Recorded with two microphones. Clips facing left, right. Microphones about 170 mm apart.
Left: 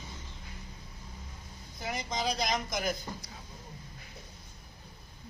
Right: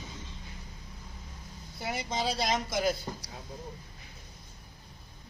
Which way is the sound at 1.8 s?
5° right (ahead or behind).